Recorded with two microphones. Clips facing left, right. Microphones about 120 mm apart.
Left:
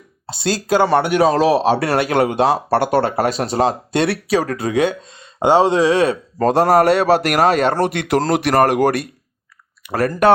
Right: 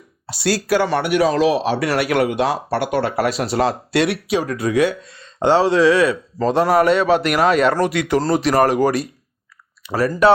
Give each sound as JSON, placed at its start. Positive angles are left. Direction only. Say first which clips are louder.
{"t": 0.4, "sound": "speech", "louder": "left 1 dB", "side_deg": 20}
{"t": 6.4, "sound": "a man's voice", "louder": "left 2 dB", "side_deg": 45}
{"t": 7.8, "sound": "speech", "louder": "even", "side_deg": 55}
{"t": 8.0, "sound": "a man's voice", "louder": "left 1 dB", "side_deg": 90}